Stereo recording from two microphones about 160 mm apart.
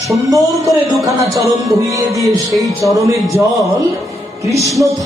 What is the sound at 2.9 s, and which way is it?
Music, 20° right (ahead or behind).